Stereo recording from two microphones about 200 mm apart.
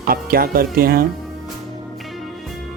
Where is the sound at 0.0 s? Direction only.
50° right (ahead or behind).